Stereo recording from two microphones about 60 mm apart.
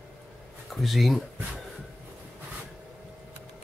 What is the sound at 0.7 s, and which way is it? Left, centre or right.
Speech, centre.